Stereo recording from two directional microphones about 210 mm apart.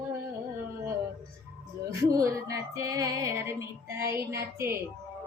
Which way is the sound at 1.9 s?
15° right (ahead or behind).